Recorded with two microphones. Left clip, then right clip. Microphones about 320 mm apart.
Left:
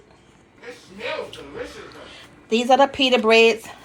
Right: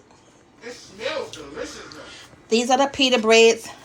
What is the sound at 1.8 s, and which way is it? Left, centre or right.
Speech, centre.